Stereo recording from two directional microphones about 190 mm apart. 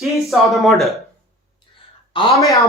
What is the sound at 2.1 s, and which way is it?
Speech, 25° left (ahead or behind).